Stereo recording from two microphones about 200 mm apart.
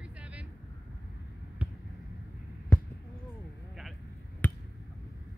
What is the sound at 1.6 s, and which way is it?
Basketball bounce, 5° right (ahead or behind).